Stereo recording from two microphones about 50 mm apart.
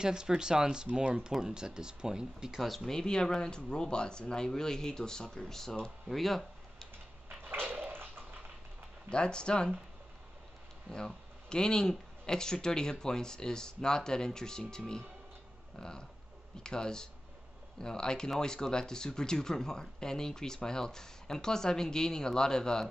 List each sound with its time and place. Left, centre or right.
0.0 s speech: centre
2.9 s speech: centre
7.2 s a sound: right
9.1 s speech: centre
10.9 s speech: centre